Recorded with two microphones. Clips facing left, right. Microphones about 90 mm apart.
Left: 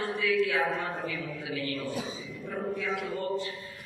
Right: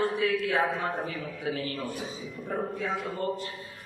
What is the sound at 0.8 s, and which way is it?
A man's voice, 40° right (ahead or behind).